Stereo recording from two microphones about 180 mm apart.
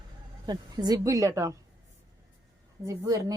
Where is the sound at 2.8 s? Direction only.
20° right (ahead or behind).